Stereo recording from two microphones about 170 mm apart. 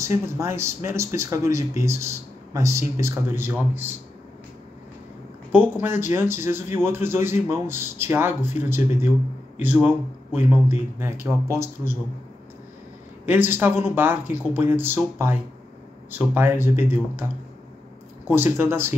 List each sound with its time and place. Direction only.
0.0 s speech: 15° right (ahead or behind)
5.5 s speech: 10° right (ahead or behind)
13.2 s speech: 10° right (ahead or behind)